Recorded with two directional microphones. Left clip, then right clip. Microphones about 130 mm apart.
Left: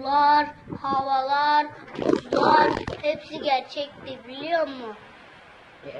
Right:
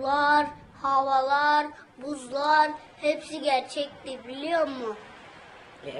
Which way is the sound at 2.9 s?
30° right (ahead or behind).